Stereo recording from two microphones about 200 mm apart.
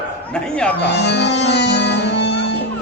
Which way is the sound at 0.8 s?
60° left (ahead or behind).